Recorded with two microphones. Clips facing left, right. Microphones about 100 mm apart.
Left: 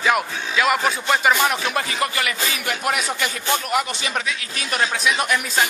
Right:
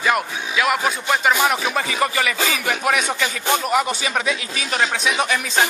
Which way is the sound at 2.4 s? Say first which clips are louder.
Right 4 dB; 90° right.